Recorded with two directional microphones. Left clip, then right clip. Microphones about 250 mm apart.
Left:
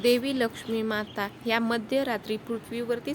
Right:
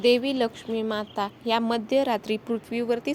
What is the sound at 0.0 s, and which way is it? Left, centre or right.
A woman's voice, centre.